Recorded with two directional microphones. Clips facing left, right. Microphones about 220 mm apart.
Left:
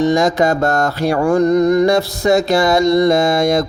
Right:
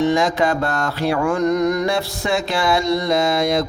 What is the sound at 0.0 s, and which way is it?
Mantra, 40° left (ahead or behind).